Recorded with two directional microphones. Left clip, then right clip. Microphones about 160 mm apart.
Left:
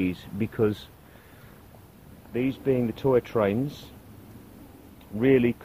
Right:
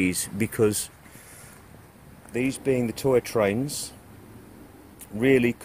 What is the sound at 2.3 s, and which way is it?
Speech, 5° right (ahead or behind).